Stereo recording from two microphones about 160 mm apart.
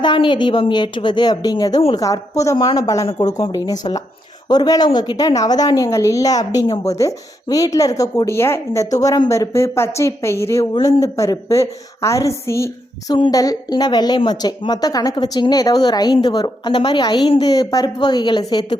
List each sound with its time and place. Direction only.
0.0 s a woman's voice: 30° left (ahead or behind)
12.5 s a sound: 15° left (ahead or behind)
13.1 s a woman's voice: 25° left (ahead or behind)